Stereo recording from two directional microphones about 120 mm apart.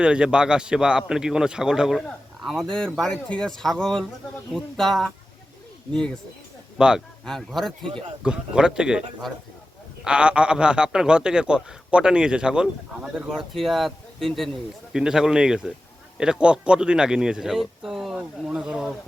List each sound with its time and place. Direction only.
0.0 s a man's voice: 10° right (ahead or behind)
6.7 s speech: 5° right (ahead or behind)
7.3 s a man's voice: 5° left (ahead or behind)